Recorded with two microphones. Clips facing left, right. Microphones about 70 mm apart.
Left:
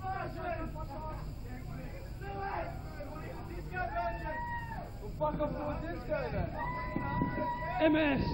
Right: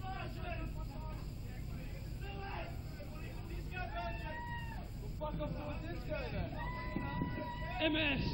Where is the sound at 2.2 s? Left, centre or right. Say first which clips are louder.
Left 9 dB; left.